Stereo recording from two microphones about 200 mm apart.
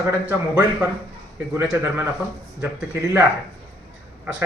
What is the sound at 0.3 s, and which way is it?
Speech, 5° right (ahead or behind).